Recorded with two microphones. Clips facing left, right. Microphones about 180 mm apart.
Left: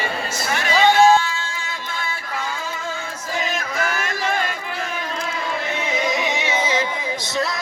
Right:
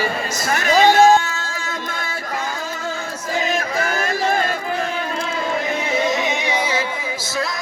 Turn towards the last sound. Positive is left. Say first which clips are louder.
# even
turn(degrees=-10)  # may be behind; listen again after turning